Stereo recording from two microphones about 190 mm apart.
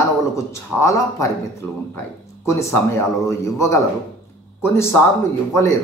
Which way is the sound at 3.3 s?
15° left (ahead or behind).